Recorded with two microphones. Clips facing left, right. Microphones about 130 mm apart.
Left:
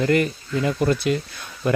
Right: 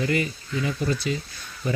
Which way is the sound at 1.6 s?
70° left (ahead or behind).